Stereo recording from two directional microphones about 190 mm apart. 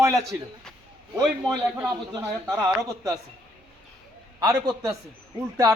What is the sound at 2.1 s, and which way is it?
Speech, 20° right (ahead or behind).